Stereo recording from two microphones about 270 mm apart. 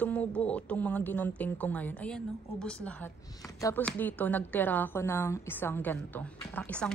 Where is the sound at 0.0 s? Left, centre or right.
Centre.